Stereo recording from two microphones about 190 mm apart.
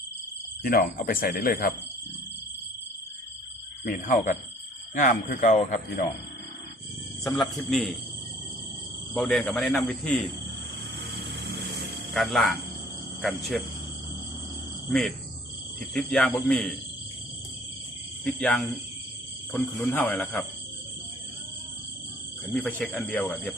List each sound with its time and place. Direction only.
0.6 s speech: 50° left (ahead or behind)
3.8 s speech: 45° left (ahead or behind)
7.3 s a man's voice: centre (ahead or behind)
9.1 s a man's voice: 5° left (ahead or behind)
12.1 s a man's voice: centre (ahead or behind)
14.8 s cricket: centre (ahead or behind)
16.0 s a man's voice: 5° left (ahead or behind)
18.3 s speech: 5° left (ahead or behind)
22.5 s speech: 5° left (ahead or behind)